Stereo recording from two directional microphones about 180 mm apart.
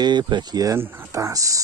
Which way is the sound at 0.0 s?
25° right (ahead or behind).